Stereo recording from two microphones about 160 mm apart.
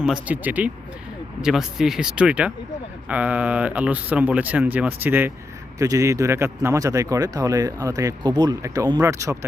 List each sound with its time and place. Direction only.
0.0 s speech: 5° right (ahead or behind)